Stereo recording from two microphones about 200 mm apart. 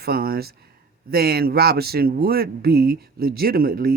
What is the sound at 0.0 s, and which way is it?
Speech, 50° right (ahead or behind).